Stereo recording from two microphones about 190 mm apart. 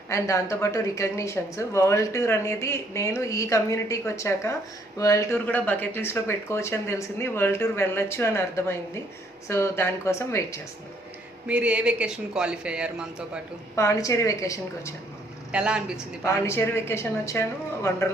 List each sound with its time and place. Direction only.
0.1 s speech: 15° left (ahead or behind)
11.4 s speech: 5° right (ahead or behind)
13.7 s speech: 15° left (ahead or behind)
15.5 s speech: 5° right (ahead or behind)
16.2 s speech: 15° left (ahead or behind)